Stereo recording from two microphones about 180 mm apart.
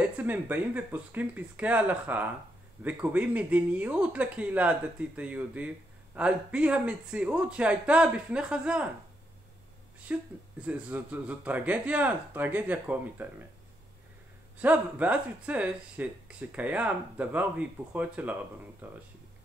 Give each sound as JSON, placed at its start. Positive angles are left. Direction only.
{"t": 0.0, "sound": "speech", "side_deg": -10}
{"t": 10.1, "sound": "speech", "side_deg": -5}
{"t": 14.6, "sound": "speech", "side_deg": -10}